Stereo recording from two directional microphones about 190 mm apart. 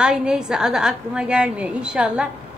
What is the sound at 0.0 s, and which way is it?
A woman's voice, 5° right (ahead or behind).